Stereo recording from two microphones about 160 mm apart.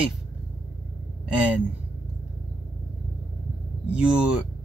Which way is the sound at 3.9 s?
5° right (ahead or behind).